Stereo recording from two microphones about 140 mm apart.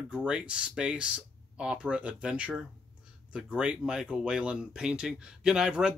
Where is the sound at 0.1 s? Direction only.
5° right (ahead or behind).